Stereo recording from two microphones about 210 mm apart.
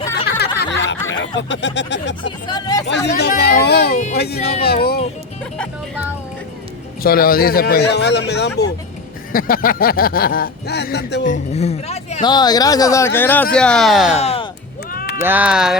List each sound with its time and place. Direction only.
0.6 s snicker: 60° left (ahead or behind)
1.1 s speech: 60° left (ahead or behind)
2.5 s speech: 20° left (ahead or behind)
2.8 s speech: 55° left (ahead or behind)
7.0 s speech: 45° left (ahead or behind)
9.3 s speech: 45° left (ahead or behind)
11.3 s speech: 30° left (ahead or behind); by 14.2 s centre (ahead or behind)
14.2 s speech: 30° left (ahead or behind)
14.9 s sheep: 45° left (ahead or behind)
15.2 s speech: 10° right (ahead or behind)